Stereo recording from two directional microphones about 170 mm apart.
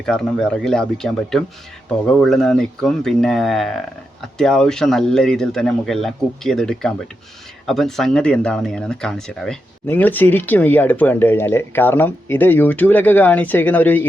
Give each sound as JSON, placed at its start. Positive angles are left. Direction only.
{"t": 0.0, "sound": "speech", "side_deg": 5}